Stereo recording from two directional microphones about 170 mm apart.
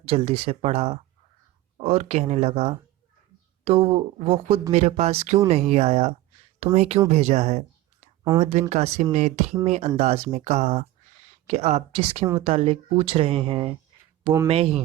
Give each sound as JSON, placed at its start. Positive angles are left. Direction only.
{"t": 0.0, "sound": "speech", "side_deg": -35}